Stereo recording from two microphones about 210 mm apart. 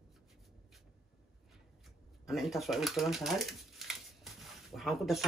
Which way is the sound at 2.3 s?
Centre (ahead or behind).